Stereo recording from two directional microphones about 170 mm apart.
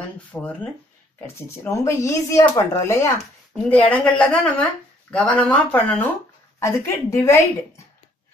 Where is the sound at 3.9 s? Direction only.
5° left (ahead or behind).